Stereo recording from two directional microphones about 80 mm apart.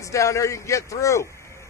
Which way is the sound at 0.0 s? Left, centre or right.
Left.